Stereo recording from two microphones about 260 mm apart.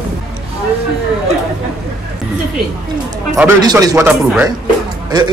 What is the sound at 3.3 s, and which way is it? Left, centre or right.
Speech, centre.